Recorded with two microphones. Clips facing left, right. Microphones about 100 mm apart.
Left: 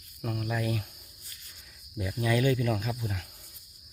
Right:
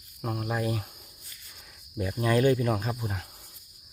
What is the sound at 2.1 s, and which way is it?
Speech, 40° right (ahead or behind).